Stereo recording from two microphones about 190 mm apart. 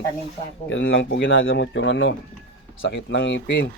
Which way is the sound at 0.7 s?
90° left.